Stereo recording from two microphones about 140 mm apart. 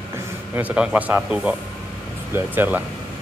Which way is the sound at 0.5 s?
10° right (ahead or behind).